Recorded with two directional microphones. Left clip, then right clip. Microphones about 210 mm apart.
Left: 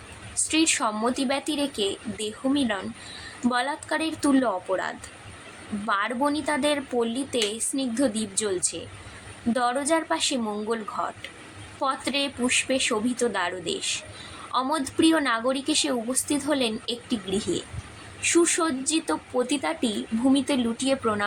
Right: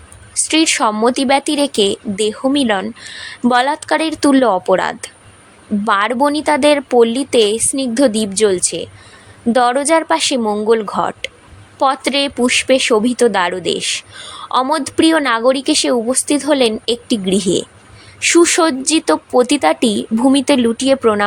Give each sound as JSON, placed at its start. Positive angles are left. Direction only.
{"t": 0.4, "sound": "a woman's voice", "side_deg": -40}